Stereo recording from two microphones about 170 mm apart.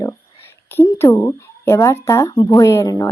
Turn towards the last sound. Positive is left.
turn(degrees=20)  # may be behind; listen again after turning